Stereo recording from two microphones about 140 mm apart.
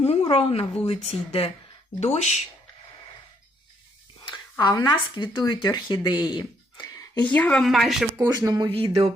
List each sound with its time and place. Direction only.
0.0 s a woman's voice: 45° left (ahead or behind)
4.3 s speech: 30° left (ahead or behind)
6.8 s a woman's voice: 20° left (ahead or behind)
7.6 s speech: centre (ahead or behind)
8.2 s speech: 25° right (ahead or behind)